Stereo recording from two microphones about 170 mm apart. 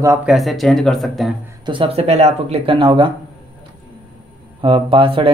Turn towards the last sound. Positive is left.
turn(degrees=-30)  # may be behind; listen again after turning